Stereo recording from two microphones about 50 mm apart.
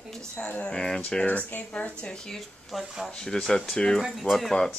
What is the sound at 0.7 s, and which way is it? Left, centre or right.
Speech, centre.